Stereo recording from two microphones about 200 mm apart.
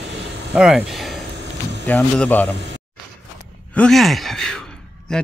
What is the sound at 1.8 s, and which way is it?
Speech, 10° left (ahead or behind).